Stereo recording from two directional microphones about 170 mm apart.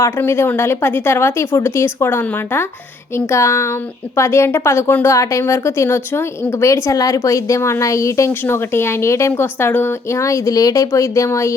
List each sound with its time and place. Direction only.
0.0 s a woman's voice: 15° left (ahead or behind)